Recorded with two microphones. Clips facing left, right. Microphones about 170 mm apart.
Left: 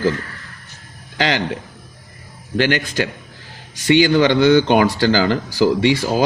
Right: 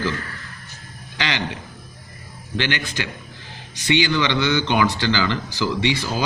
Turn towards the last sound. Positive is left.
turn(degrees=45)  # may be behind; listen again after turning